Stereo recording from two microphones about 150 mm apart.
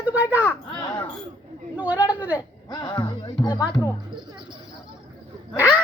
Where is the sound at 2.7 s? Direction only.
30° left (ahead or behind).